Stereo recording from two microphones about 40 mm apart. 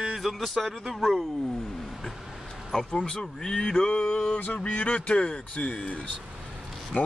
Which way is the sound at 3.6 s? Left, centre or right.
Left.